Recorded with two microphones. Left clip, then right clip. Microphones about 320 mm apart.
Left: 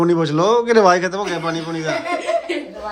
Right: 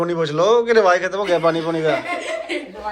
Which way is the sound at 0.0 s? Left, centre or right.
Centre.